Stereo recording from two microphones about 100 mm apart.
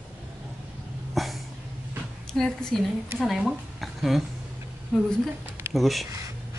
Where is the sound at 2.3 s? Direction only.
5° left (ahead or behind).